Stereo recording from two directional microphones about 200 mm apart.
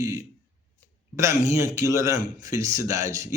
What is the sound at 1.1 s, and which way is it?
Speech, 15° right (ahead or behind).